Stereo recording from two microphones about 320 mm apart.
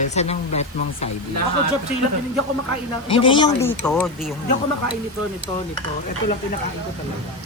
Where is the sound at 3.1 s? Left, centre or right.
Centre.